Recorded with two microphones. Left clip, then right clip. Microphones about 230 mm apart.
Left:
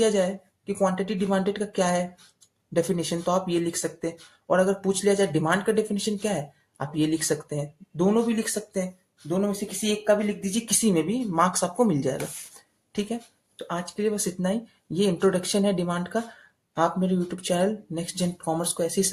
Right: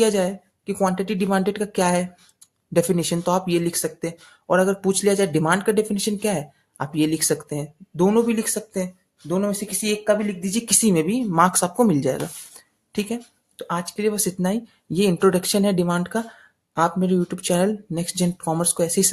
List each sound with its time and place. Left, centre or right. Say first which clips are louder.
0.0 s speech: right 3 dB; right